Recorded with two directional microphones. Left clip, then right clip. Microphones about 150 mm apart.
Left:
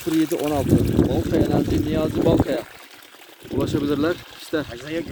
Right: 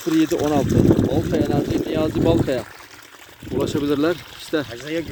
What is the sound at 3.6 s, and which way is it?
Speech, centre (ahead or behind).